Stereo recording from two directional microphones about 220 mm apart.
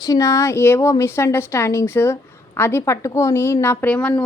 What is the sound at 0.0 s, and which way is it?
A woman's voice, 15° left (ahead or behind).